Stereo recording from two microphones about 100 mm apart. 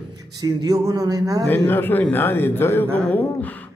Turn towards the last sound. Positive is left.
turn(degrees=15)  # may be behind; listen again after turning